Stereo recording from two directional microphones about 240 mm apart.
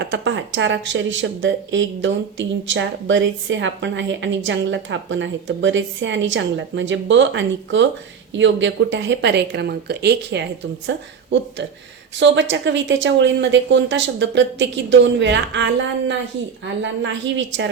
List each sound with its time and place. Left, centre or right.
0.0 s a woman's voice: right